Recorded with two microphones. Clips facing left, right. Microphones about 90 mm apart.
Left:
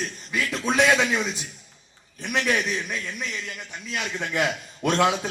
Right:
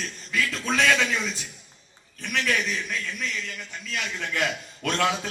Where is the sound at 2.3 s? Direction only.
25° left (ahead or behind).